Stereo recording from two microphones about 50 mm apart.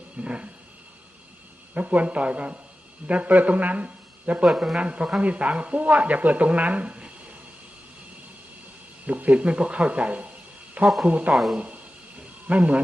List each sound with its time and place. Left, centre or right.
0.2 s speech: right
1.7 s a man's voice: right
4.4 s a man's voice: centre
4.8 s speech: right
9.0 s speech: right
12.5 s speech: right